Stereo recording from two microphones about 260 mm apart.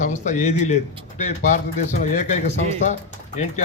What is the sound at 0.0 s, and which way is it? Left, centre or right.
Speech, left.